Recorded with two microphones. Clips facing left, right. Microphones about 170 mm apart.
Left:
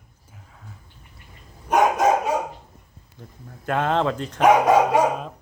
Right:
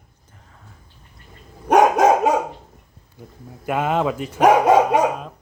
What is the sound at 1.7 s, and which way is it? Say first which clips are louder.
Dog: right 4 dB; 90° right.